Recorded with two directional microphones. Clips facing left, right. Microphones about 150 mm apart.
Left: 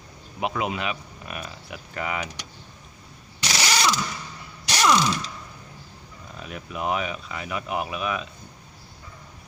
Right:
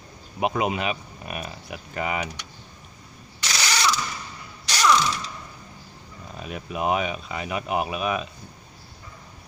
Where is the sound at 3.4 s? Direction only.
25° left (ahead or behind).